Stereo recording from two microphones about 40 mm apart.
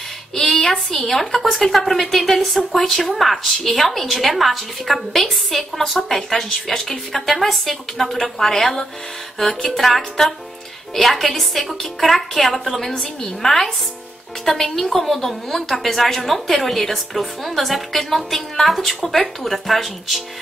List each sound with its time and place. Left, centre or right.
0.3 s a woman's voice: centre
12.9 s a woman's voice: left
13.4 s a woman's voice: centre
18.9 s a woman's voice: centre